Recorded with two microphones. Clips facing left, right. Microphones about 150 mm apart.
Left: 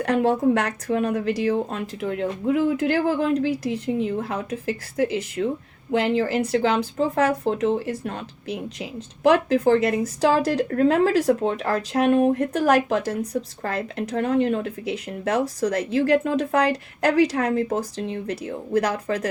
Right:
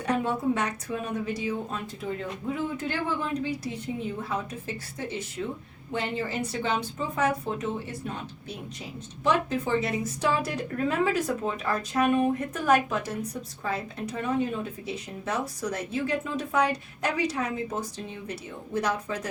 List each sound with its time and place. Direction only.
0.0 s speech: 90° left